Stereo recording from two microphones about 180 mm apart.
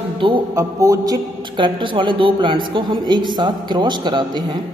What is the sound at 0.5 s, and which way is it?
A man's voice, 20° right (ahead or behind).